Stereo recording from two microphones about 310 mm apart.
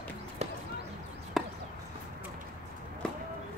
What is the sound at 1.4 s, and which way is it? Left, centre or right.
Chop, centre.